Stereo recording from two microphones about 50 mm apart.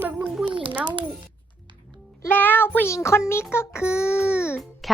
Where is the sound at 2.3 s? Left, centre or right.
Left.